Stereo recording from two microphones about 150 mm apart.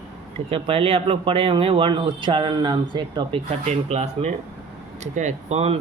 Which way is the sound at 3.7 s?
45° right (ahead or behind).